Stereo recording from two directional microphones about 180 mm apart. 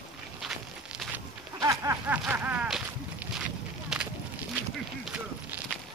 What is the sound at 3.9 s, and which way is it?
Walk, 5° right (ahead or behind).